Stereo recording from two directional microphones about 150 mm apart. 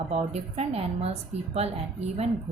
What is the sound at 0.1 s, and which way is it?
Speech, 45° right (ahead or behind).